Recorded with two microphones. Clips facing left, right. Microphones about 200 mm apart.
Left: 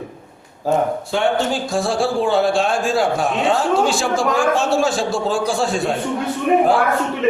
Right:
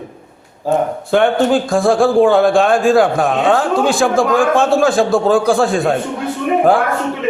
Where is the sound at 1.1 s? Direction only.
55° right (ahead or behind).